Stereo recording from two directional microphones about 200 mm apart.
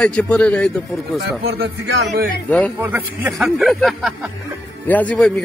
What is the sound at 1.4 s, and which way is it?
Speech, 50° right (ahead or behind).